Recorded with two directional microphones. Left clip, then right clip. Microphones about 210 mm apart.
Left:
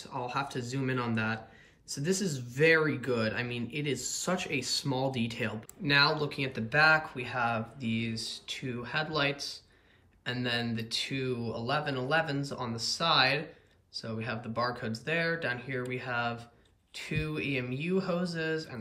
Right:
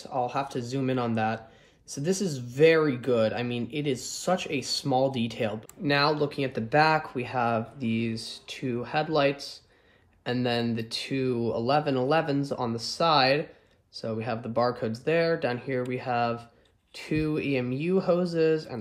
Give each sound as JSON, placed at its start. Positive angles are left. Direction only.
{"t": 0.0, "sound": "speech", "side_deg": -10}